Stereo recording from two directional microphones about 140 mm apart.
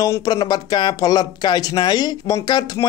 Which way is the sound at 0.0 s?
25° left (ahead or behind).